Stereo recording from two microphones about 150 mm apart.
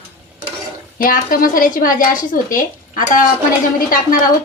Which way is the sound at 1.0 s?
70° left (ahead or behind).